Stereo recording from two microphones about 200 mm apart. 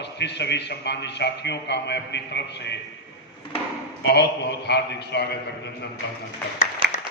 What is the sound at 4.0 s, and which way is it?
A man's voice, 55° left (ahead or behind).